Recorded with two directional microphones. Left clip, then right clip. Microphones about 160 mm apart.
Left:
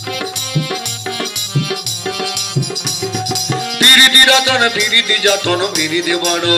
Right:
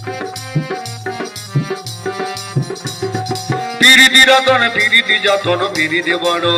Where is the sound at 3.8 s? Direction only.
30° right (ahead or behind).